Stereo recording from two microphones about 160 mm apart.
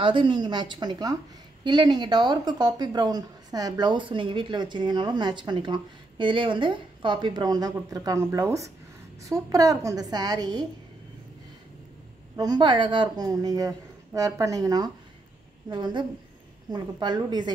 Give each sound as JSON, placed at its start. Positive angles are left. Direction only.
{"t": 0.0, "sound": "speech", "side_deg": -30}
{"t": 12.4, "sound": "speech", "side_deg": -25}